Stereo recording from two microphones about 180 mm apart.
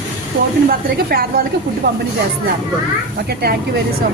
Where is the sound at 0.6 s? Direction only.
55° right (ahead or behind).